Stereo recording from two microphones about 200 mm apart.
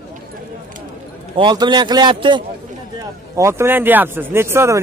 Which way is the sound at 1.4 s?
25° right (ahead or behind).